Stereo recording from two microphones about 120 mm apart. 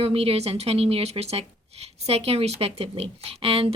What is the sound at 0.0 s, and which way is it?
A woman's voice, 55° right (ahead or behind).